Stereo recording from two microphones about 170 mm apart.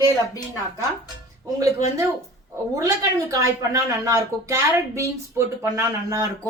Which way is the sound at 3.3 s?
20° right (ahead or behind).